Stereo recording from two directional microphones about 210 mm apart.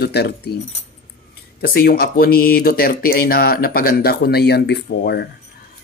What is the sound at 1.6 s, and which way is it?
A man's voice, 45° left (ahead or behind).